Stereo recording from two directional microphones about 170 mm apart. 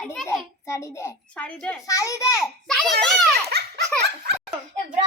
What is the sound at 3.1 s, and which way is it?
Children playing, centre (ahead or behind).